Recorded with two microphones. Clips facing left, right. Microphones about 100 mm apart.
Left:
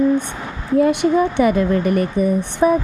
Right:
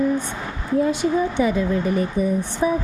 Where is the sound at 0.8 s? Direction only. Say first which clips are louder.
Left 5 dB; 65° left (ahead or behind).